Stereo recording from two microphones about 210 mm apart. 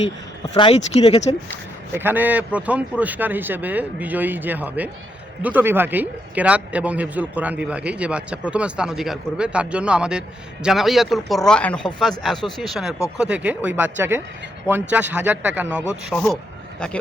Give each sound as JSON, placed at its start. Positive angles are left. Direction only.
{"t": 0.4, "sound": "speech", "side_deg": 25}
{"t": 1.9, "sound": "a man's voice", "side_deg": -10}